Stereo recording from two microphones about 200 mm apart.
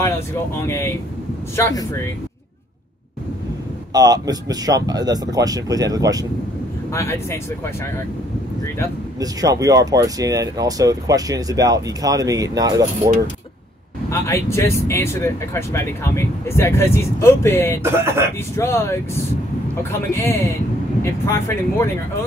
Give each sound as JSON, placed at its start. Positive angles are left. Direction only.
{"t": 0.6, "sound": "speech", "side_deg": 15}
{"t": 3.9, "sound": "speech", "side_deg": -20}
{"t": 6.9, "sound": "speech", "side_deg": 15}
{"t": 9.2, "sound": "speech", "side_deg": -15}
{"t": 14.1, "sound": "speech", "side_deg": 15}
{"t": 17.8, "sound": "speech", "side_deg": -15}
{"t": 18.6, "sound": "speech", "side_deg": 15}